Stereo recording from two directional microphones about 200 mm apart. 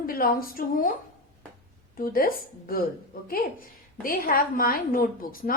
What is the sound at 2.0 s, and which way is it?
A woman's voice, 45° left (ahead or behind).